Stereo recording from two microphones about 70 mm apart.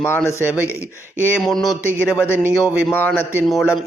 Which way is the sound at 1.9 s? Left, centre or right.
Left.